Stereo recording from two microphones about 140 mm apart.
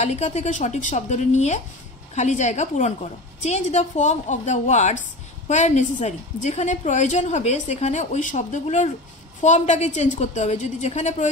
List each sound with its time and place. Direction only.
0.0 s a woman's voice: 55° left (ahead or behind)